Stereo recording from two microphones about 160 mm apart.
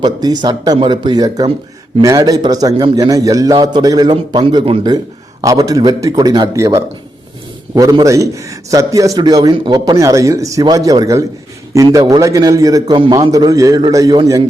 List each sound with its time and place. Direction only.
0.0 s a man's voice: 25° right (ahead or behind)